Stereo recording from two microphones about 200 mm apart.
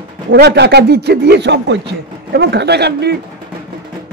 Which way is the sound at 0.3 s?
55° right (ahead or behind).